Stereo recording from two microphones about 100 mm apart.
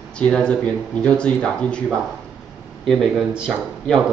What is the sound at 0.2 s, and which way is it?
A man's voice, 10° left (ahead or behind).